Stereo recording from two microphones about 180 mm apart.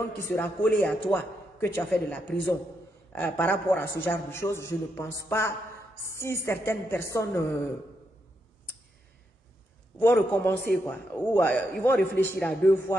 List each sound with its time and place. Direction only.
0.0 s a man's voice: 10° left (ahead or behind)
9.9 s a man's voice: 10° left (ahead or behind)